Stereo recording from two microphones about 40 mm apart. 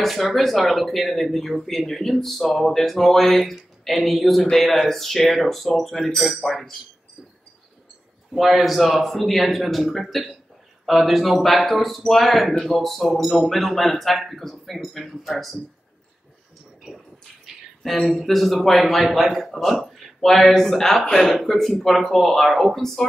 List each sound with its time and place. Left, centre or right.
0.0 s speech: centre
8.4 s speech: centre
17.8 s speech: centre